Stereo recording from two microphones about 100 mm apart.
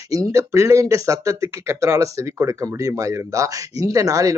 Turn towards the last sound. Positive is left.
turn(degrees=-35)  # may be behind; listen again after turning